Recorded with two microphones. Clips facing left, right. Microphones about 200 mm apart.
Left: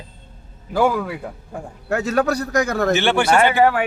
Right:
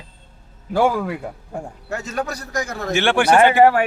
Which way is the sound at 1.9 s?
60° left (ahead or behind).